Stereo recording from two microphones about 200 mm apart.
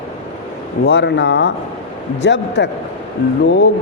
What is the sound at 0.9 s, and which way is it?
Speech, 60° left (ahead or behind).